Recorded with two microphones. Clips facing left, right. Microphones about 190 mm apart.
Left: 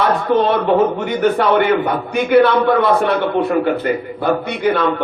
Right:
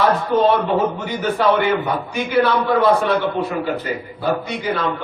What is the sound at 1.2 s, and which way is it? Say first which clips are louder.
A man's voice: left 3 dB; 60° left (ahead or behind).